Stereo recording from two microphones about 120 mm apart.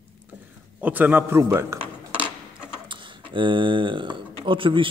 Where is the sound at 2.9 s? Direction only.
45° right (ahead or behind).